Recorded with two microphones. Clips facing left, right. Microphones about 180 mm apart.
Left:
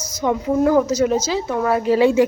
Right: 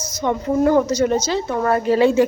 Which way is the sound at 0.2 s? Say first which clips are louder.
Even; 5° left (ahead or behind).